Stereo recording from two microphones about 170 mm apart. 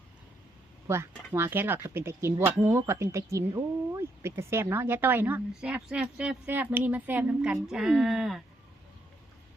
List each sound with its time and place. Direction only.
0.9 s a woman's voice: 15° right (ahead or behind)